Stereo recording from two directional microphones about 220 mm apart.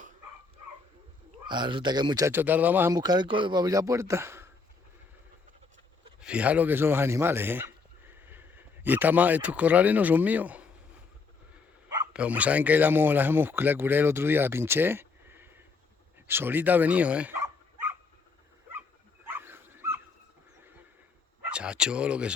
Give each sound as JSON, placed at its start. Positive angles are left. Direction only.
{"t": 1.5, "sound": "speech", "side_deg": -20}
{"t": 6.1, "sound": "speech", "side_deg": -5}
{"t": 8.1, "sound": "a sound", "side_deg": -10}
{"t": 12.1, "sound": "speech", "side_deg": -5}
{"t": 19.3, "sound": "dog", "side_deg": -10}
{"t": 21.5, "sound": "speech", "side_deg": -5}